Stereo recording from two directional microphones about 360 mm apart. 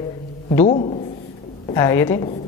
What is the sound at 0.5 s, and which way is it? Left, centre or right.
A woman's voice, centre.